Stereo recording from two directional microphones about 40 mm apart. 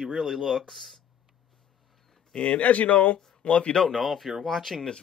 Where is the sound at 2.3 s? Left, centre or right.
Left.